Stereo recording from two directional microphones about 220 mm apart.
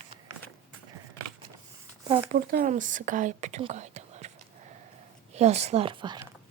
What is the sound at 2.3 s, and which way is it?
Speech, 40° right (ahead or behind).